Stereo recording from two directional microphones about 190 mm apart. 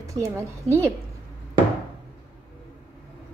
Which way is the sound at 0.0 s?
15° right (ahead or behind).